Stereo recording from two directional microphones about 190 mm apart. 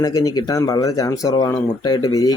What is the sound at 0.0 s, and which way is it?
Speech, 20° left (ahead or behind).